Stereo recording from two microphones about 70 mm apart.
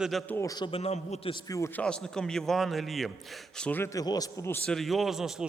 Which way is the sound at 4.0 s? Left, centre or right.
Left.